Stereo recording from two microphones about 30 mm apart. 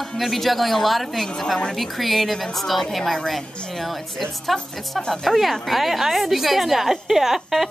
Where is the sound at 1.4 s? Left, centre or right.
Left.